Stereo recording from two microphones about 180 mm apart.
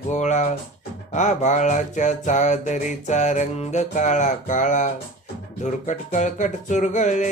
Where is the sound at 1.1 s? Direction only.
40° left (ahead or behind).